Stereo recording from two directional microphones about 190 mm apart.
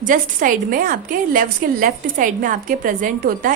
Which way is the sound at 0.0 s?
45° right (ahead or behind).